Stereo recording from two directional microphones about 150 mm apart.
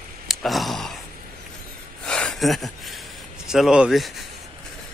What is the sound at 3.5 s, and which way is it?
Speech, 5° right (ahead or behind).